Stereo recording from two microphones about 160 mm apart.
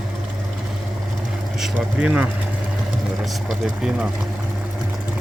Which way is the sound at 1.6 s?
Centre (ahead or behind).